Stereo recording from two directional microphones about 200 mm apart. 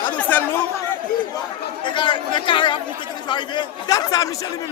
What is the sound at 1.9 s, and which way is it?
A man's voice, 25° left (ahead or behind).